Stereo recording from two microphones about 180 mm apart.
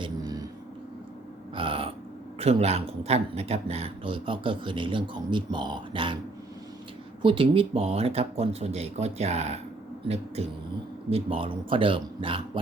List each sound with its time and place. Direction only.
0.0 s a sound: 20° right (ahead or behind)
1.5 s burping: 30° right (ahead or behind)
2.4 s speech: 35° right (ahead or behind)
7.2 s speech: 30° right (ahead or behind)
11.1 s speech: 30° right (ahead or behind)